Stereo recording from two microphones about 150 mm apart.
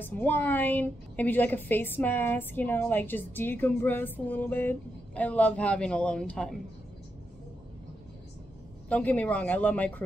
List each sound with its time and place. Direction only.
0.0 s a woman's voice: 15° left (ahead or behind)
8.8 s a woman's voice: 10° left (ahead or behind)